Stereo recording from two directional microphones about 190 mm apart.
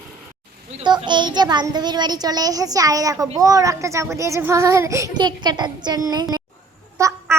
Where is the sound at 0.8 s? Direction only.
25° right (ahead or behind).